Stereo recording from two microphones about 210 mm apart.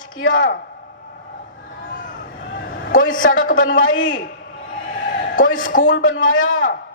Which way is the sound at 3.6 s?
65° left (ahead or behind).